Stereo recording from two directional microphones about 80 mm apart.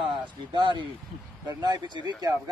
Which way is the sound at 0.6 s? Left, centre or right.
Right.